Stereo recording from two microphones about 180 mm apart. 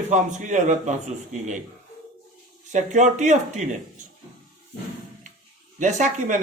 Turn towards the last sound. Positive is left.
turn(degrees=-40)  # may be behind; listen again after turning